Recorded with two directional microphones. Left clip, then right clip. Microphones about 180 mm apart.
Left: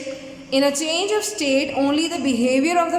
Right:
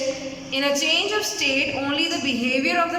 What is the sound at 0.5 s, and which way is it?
A woman's voice, 30° left (ahead or behind).